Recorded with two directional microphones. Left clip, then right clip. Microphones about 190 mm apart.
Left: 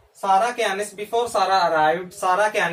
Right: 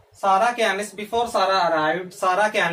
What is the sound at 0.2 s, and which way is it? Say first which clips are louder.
Speech: right 1 dB; 15° right (ahead or behind).